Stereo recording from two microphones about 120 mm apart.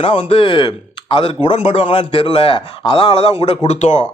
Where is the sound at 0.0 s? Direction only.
50° left (ahead or behind).